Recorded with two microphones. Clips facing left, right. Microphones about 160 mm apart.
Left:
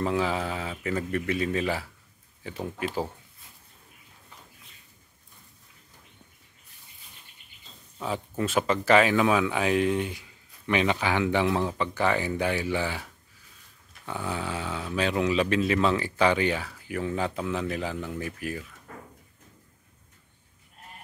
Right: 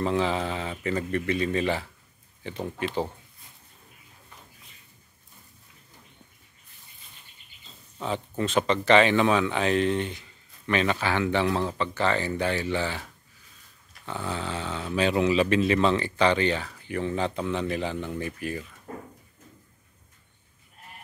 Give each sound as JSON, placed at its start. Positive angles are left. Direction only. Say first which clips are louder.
{"t": 0.0, "sound": "speech", "louder": "right 1 dB", "side_deg": 5}
{"t": 8.0, "sound": "speech", "louder": "right 1 dB", "side_deg": 5}
{"t": 14.0, "sound": "speech", "louder": "even", "side_deg": 10}
{"t": 18.9, "sound": "a sound", "louder": "right 8 dB", "side_deg": -35}